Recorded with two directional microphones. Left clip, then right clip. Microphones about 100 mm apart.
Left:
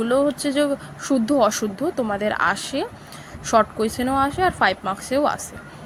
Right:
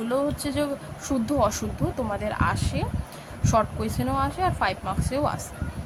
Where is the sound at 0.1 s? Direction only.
45° left (ahead or behind).